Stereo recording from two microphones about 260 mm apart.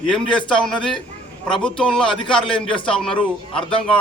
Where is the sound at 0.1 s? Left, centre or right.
Centre.